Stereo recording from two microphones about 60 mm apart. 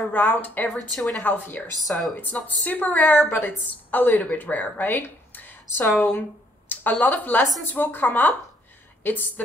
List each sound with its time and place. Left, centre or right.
0.1 s speech: left
1.8 s speech: centre
2.4 s a woman's voice: left
5.9 s speech: centre
6.7 s speech: left